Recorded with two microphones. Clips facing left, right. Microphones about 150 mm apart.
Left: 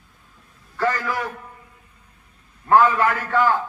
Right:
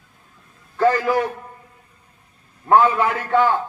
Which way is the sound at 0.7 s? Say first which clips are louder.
Right 6 dB; 20° right (ahead or behind).